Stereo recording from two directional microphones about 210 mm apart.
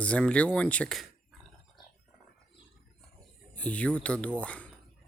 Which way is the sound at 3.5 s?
5° left (ahead or behind).